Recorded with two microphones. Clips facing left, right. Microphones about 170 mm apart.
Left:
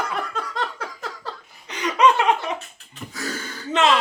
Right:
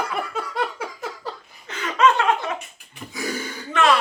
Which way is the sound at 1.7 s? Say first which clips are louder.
Left 1 dB; 15° left (ahead or behind).